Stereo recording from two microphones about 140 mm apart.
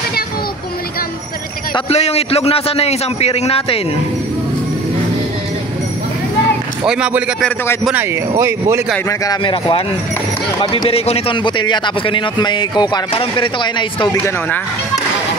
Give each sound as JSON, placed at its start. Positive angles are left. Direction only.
{"t": 1.9, "sound": "a man's voice", "side_deg": 50}
{"t": 6.8, "sound": "speech", "side_deg": -10}
{"t": 9.4, "sound": "speech", "side_deg": 40}
{"t": 10.9, "sound": "speech", "side_deg": 45}